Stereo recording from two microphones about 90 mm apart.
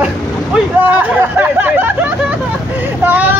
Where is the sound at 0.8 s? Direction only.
20° right (ahead or behind).